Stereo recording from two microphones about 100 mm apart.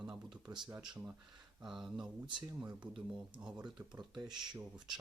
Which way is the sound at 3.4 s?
5° right (ahead or behind).